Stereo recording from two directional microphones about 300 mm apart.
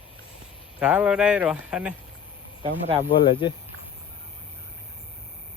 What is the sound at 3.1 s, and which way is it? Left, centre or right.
Speech, centre.